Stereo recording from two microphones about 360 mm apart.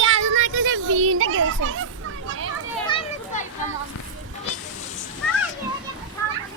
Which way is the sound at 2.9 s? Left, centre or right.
Centre.